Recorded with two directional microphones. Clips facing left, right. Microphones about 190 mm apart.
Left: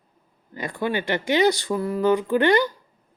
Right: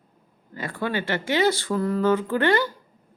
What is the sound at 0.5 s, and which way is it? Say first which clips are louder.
Speech: left 2 dB; 15° left (ahead or behind).